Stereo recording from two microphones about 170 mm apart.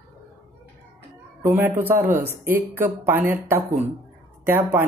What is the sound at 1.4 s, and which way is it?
Speech, 10° right (ahead or behind).